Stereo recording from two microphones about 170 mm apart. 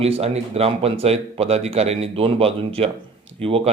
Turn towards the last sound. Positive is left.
turn(degrees=-35)  # may be behind; listen again after turning